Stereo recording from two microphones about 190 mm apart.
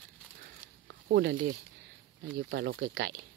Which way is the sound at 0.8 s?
65° right (ahead or behind).